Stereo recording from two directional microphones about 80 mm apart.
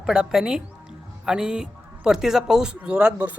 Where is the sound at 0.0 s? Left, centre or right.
Centre.